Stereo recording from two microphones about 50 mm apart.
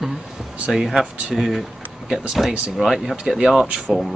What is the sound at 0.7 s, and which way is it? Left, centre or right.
Speech, centre.